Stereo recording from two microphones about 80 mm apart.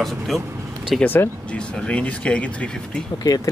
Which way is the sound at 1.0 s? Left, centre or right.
Left.